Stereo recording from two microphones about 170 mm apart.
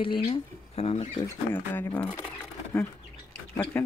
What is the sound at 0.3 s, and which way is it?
Speech, 40° left (ahead or behind).